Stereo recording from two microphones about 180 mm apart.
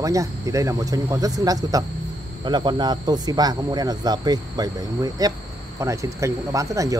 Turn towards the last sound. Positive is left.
turn(degrees=-15)  # may be behind; listen again after turning